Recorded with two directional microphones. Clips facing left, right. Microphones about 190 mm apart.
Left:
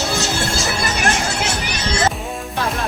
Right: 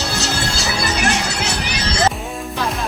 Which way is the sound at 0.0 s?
70° right (ahead or behind).